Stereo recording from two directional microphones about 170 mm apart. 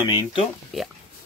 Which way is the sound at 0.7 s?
Centre (ahead or behind).